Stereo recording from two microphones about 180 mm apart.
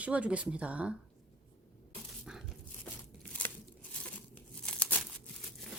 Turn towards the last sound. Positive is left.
turn(degrees=5)  # may be behind; listen again after turning